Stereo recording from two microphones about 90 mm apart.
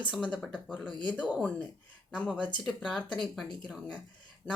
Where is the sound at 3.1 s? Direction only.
5° left (ahead or behind).